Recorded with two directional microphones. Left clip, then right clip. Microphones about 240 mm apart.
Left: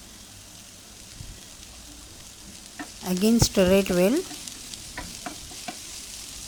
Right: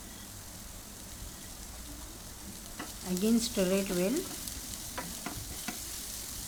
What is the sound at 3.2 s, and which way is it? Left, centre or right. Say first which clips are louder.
Speech: left 9 dB; left.